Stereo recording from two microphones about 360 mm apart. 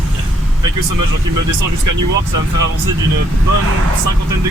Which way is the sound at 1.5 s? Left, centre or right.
Right.